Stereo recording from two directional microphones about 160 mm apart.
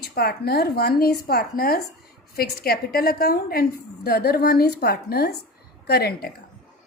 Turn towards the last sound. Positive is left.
turn(degrees=75)  # may be behind; listen again after turning